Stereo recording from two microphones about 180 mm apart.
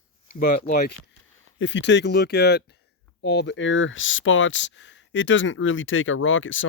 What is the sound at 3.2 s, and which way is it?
Speech, 75° left (ahead or behind).